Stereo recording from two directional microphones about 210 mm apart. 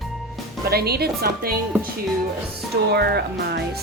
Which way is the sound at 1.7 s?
10° right (ahead or behind).